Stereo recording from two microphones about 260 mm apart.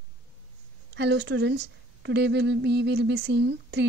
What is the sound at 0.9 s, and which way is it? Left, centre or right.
Speech, right.